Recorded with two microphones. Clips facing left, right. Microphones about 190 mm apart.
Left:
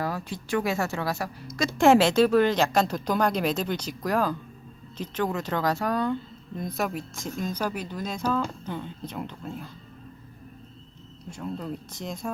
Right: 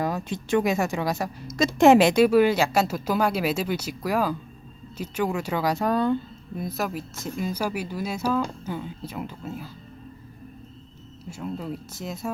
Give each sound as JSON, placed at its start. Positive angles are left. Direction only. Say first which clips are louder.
{"t": 0.0, "sound": "speech", "louder": "right 3 dB", "side_deg": -20}
{"t": 5.8, "sound": "speech", "louder": "right 4 dB", "side_deg": -25}
{"t": 6.6, "sound": "speech", "louder": "even", "side_deg": 0}
{"t": 11.3, "sound": "speech", "louder": "right 1 dB", "side_deg": -5}